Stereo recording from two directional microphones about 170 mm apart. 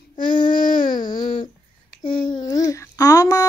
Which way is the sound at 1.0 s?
25° left (ahead or behind).